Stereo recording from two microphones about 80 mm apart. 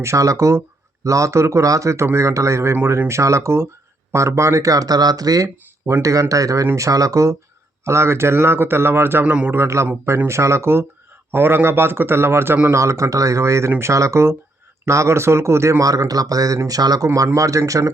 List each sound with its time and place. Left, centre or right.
0.0 s speech: right
9.2 s a man's voice: centre
9.6 s a man's voice: right
12.7 s speech: right
15.8 s speech: right